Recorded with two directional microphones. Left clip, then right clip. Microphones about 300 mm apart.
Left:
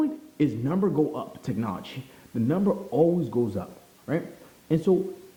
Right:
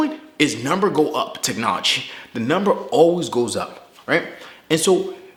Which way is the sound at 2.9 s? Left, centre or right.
Right.